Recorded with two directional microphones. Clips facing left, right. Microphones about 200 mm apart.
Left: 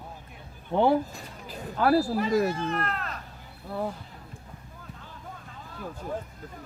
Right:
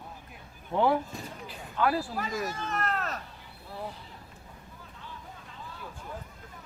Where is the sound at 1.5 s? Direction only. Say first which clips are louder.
Left 5 dB; 40° left (ahead or behind).